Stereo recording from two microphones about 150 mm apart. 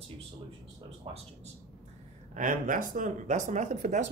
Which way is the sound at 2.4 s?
60° right (ahead or behind).